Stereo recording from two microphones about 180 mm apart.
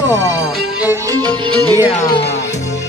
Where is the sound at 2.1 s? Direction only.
35° left (ahead or behind).